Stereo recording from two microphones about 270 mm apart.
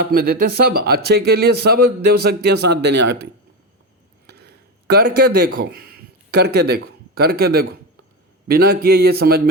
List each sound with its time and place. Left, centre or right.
0.0 s speech: right
4.3 s a sound: right
5.5 s speech: right